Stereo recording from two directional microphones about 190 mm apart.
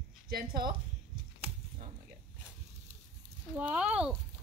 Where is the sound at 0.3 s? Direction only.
50° right (ahead or behind).